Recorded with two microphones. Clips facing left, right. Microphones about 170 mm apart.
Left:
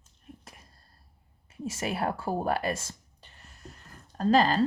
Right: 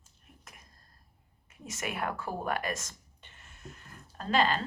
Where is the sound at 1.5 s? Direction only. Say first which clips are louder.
Left 6 dB; 30° left (ahead or behind).